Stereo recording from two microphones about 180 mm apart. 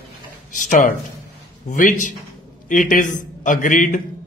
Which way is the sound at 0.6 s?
45° left (ahead or behind).